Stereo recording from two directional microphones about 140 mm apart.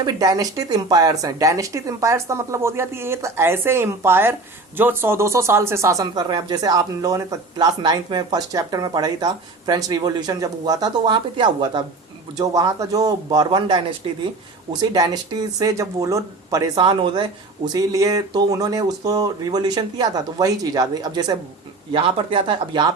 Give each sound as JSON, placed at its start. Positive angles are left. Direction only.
{"t": 0.0, "sound": "speech", "side_deg": -25}
{"t": 17.7, "sound": "speech", "side_deg": -25}